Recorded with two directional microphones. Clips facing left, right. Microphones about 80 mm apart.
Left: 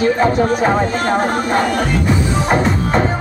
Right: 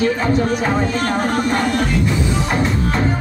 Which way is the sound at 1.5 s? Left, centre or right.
Left.